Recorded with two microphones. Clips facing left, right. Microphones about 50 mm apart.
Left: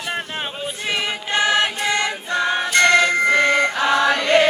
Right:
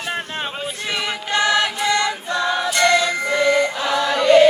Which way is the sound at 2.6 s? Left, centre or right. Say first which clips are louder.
Left 3 dB; left.